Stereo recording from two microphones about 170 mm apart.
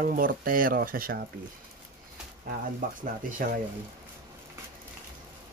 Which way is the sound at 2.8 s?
50° right (ahead or behind).